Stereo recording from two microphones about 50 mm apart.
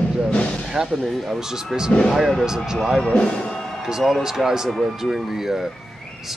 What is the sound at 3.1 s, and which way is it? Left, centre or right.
Speech, centre.